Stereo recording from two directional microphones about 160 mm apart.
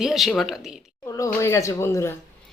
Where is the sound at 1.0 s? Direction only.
20° left (ahead or behind).